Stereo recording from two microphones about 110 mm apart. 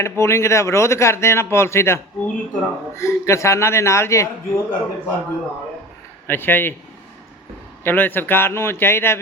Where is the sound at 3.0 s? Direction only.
25° left (ahead or behind).